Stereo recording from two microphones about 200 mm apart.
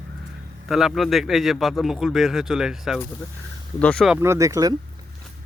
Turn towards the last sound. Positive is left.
turn(degrees=-15)  # may be behind; listen again after turning